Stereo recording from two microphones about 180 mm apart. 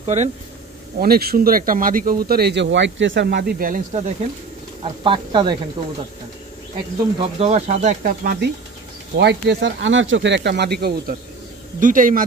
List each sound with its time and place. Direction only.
0.0 s speech: 40° right (ahead or behind)
0.9 s speech: 55° right (ahead or behind)
4.8 s speech: 30° right (ahead or behind)
7.2 s speech: 35° right (ahead or behind); by 8.5 s 55° right (ahead or behind)
9.1 s speech: 70° right (ahead or behind)
11.8 s speech: 50° right (ahead or behind)